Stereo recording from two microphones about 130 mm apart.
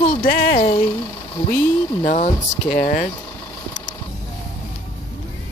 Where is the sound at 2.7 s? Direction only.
90° left.